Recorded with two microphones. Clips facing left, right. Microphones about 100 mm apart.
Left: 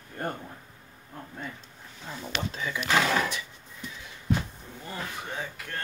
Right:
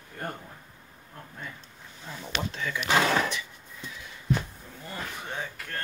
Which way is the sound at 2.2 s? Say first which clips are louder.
Even; 10° left (ahead or behind).